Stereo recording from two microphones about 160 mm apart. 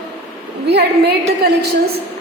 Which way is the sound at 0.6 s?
90° right.